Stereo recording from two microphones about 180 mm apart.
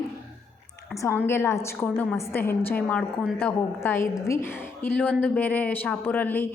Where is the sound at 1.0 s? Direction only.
15° left (ahead or behind).